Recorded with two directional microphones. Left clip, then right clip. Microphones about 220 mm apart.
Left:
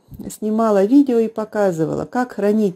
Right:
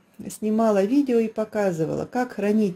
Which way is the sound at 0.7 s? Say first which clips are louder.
Left 7 dB; 35° left (ahead or behind).